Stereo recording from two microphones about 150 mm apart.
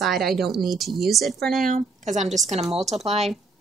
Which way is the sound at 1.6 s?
55° right (ahead or behind).